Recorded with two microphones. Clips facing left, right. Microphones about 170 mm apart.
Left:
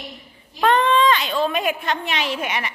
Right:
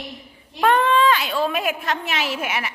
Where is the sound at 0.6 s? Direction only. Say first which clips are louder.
Even; 10° right (ahead or behind).